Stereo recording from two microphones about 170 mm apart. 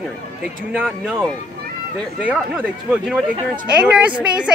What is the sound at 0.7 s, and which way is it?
Speech, 5° right (ahead or behind).